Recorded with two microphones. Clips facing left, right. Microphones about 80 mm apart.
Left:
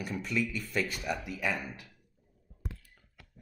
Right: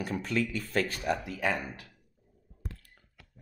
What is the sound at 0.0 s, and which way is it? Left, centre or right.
Speech, right.